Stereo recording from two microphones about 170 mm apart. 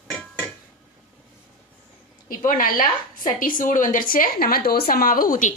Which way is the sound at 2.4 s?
55° left (ahead or behind).